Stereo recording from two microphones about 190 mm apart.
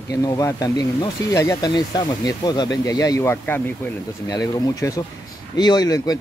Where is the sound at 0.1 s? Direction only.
20° left (ahead or behind).